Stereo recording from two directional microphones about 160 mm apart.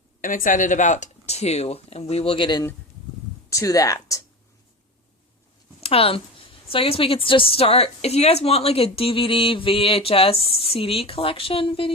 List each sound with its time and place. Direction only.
0.2 s speech: 55° left (ahead or behind); by 4.2 s 20° left (ahead or behind)
5.8 s a woman's voice: 35° left (ahead or behind)